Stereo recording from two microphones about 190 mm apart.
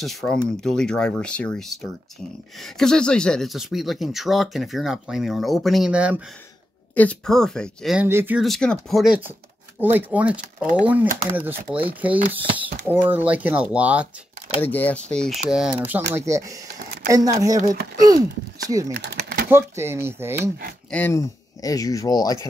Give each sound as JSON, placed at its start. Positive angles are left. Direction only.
{"t": 0.0, "sound": "speech", "side_deg": 0}
{"t": 7.0, "sound": "speech", "side_deg": 5}
{"t": 8.5, "sound": "speech", "side_deg": 5}
{"t": 14.6, "sound": "speech", "side_deg": 10}
{"t": 18.9, "sound": "a sound", "side_deg": -60}
{"t": 19.5, "sound": "speech", "side_deg": -15}
{"t": 20.9, "sound": "speech", "side_deg": 15}